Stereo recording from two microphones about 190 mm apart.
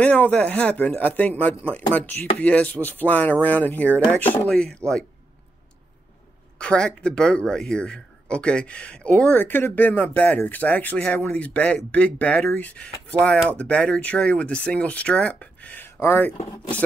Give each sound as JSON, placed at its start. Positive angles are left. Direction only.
{"t": 0.0, "sound": "speech", "side_deg": 5}
{"t": 6.6, "sound": "speech", "side_deg": 5}
{"t": 16.3, "sound": "speech", "side_deg": 30}